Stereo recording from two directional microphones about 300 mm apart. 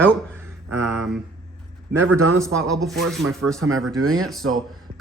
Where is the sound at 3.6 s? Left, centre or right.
Right.